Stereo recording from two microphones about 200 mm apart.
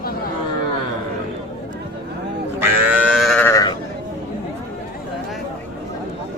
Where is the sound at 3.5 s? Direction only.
20° left (ahead or behind).